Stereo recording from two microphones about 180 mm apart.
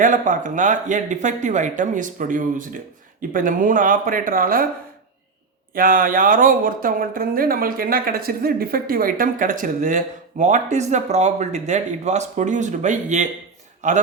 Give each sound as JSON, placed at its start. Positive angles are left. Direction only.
{"t": 0.0, "sound": "speech", "side_deg": -45}
{"t": 5.7, "sound": "speech", "side_deg": -50}